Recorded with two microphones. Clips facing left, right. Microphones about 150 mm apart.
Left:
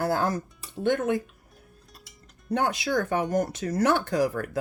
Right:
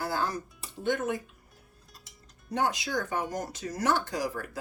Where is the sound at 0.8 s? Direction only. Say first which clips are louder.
Left 5 dB; 65° left (ahead or behind).